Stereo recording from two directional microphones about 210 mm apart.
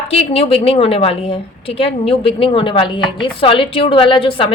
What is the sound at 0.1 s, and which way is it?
A woman's voice, 25° left (ahead or behind).